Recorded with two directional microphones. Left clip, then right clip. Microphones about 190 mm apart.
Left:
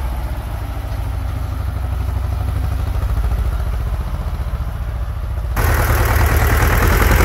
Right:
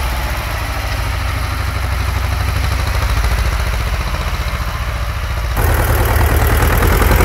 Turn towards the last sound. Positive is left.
turn(degrees=5)  # may be behind; listen again after turning